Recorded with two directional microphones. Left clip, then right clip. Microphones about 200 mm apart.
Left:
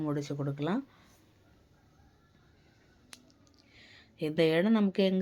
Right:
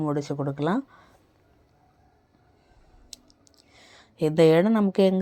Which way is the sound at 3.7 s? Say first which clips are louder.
Right 4 dB; 25° right (ahead or behind).